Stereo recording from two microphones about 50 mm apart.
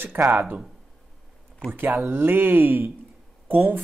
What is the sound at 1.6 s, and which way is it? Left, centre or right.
Speech, left.